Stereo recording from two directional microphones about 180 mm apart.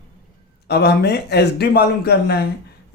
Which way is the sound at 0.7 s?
65° left (ahead or behind).